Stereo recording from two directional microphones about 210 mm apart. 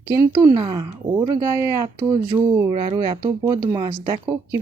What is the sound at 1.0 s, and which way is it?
Speech, 40° right (ahead or behind).